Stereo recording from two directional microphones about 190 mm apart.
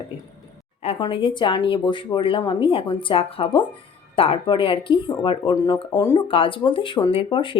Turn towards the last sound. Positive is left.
turn(degrees=25)  # may be behind; listen again after turning